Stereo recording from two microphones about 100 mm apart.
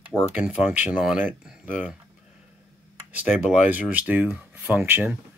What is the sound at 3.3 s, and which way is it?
Speech, 10° right (ahead or behind).